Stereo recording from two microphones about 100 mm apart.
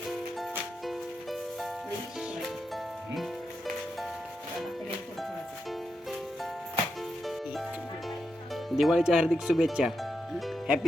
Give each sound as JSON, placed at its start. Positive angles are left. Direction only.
{"t": 0.9, "sound": "music", "side_deg": 0}
{"t": 8.7, "sound": "speech", "side_deg": 0}